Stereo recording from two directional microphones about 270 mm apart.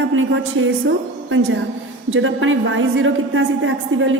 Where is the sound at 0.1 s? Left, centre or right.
Right.